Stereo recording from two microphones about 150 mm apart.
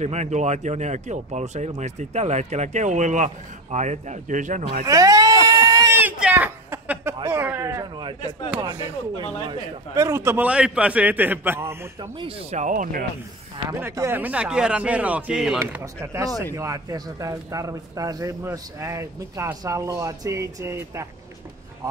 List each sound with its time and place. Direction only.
0.0 s speech: 50° right (ahead or behind)
4.8 s a sound: 25° right (ahead or behind)
5.9 s a sound: 10° right (ahead or behind)
7.2 s a man's voice: 15° right (ahead or behind)
8.0 s a man's voice: 30° right (ahead or behind)
9.9 s a man's voice: 20° right (ahead or behind)
12.2 s speech: 40° right (ahead or behind); by 13.0 s 60° right (ahead or behind)
13.7 s a man's voice: 20° right (ahead or behind); by 15.6 s 5° right (ahead or behind)
15.6 s a man's voice: 20° right (ahead or behind)